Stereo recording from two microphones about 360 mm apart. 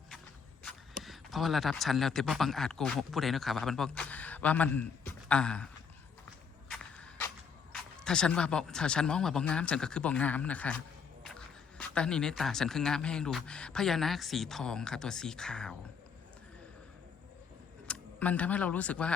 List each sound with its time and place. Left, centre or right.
0.6 s speech: centre
6.7 s a sound: centre
7.7 s speech: centre
17.8 s speech: centre